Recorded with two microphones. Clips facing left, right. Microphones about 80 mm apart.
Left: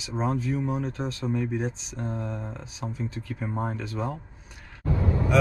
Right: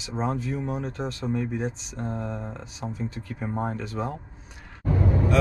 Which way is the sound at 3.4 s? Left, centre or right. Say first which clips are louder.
Right 2 dB; right.